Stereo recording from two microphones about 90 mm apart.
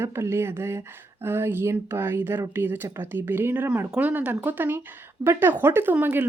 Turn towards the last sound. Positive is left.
turn(degrees=-20)  # may be behind; listen again after turning